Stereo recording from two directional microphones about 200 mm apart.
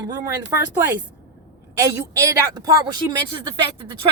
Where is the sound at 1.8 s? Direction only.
15° right (ahead or behind).